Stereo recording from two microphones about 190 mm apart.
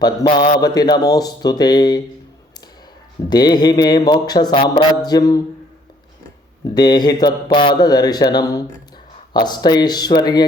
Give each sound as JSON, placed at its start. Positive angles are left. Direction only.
{"t": 0.0, "sound": "speech", "side_deg": 20}
{"t": 3.2, "sound": "speech", "side_deg": 20}
{"t": 6.7, "sound": "speech", "side_deg": 20}